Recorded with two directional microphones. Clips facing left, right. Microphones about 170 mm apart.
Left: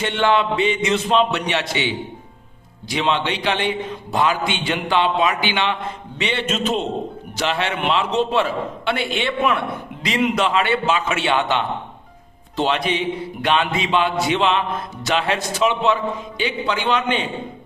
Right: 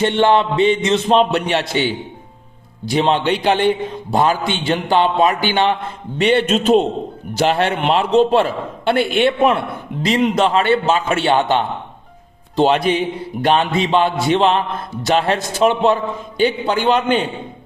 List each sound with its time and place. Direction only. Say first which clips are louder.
0.0 s a man's voice: right 4 dB; 35° right (ahead or behind)
2.9 s a man's voice: right 5 dB; 40° right (ahead or behind)
10.0 s a man's voice: right 4 dB; 35° right (ahead or behind)